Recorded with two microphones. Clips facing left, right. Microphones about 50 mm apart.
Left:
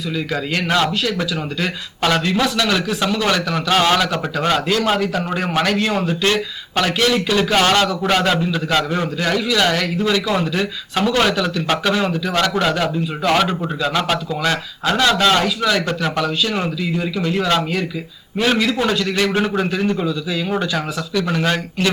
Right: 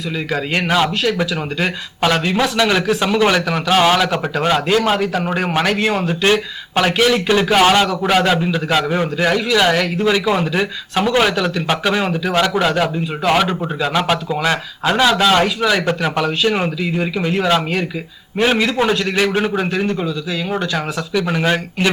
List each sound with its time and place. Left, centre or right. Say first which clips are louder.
0.7 s a man's voice: right 2 dB; centre
2.8 s a man's voice: right 3 dB; centre
3.1 s speech: right 4 dB; centre
3.7 s a man's voice: right 2 dB; centre
5.3 s a man's voice: right 2 dB; centre
5.9 s a man's voice: right 1 dB; centre
6.2 s a man's voice: right 3 dB; right
8.4 s a man's voice: right 1 dB; centre
21.1 s a man's voice: right 2 dB; centre